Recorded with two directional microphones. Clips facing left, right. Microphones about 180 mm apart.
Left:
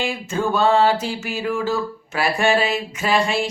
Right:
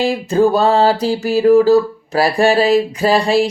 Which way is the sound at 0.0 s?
35° right (ahead or behind).